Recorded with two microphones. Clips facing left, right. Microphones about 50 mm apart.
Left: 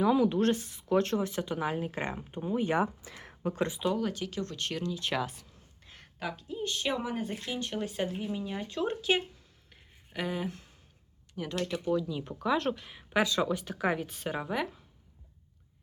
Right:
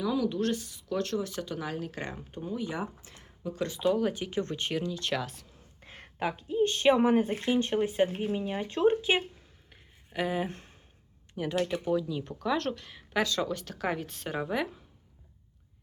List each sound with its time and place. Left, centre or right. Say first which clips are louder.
0.0 s speech: left 4 dB; left
2.7 s speech: left 7 dB; left
3.8 s speech: right 9 dB; centre
4.1 s speech: right 3 dB; right
4.7 s speech: right 2 dB; centre
4.9 s speech: even; centre
5.8 s a woman's voice: right 5 dB; right
8.2 s speech: right 4 dB; right
10.1 s speech: right 3 dB; centre
11.9 s speech: right 1 dB; centre